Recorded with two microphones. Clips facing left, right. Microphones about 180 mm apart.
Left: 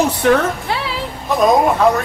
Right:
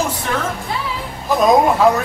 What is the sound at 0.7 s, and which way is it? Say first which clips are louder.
Music: left 3 dB; 75° left (ahead or behind).